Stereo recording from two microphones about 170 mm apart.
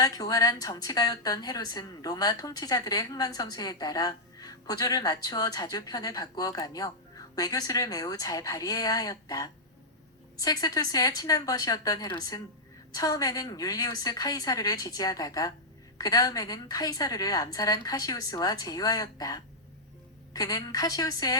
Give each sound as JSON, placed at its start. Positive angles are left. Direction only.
{"t": 0.0, "sound": "a woman's voice", "side_deg": 20}